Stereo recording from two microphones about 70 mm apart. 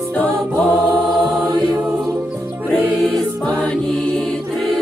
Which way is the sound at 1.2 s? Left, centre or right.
Centre.